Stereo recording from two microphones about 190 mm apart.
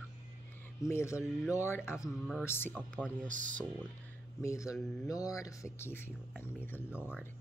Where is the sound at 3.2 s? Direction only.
45° right (ahead or behind).